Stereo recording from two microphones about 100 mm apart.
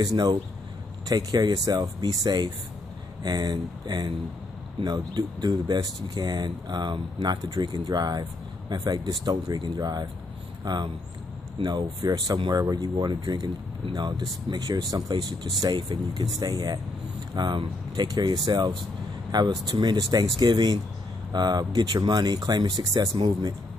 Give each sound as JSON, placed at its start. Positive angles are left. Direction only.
{"t": 0.0, "sound": "speech", "side_deg": -45}